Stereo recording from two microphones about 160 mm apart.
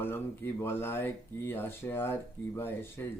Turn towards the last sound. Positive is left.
turn(degrees=15)  # may be behind; listen again after turning